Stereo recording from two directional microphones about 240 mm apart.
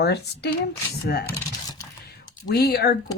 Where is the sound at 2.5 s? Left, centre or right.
Left.